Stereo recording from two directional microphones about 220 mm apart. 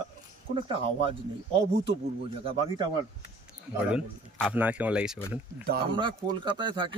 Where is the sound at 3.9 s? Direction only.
5° right (ahead or behind).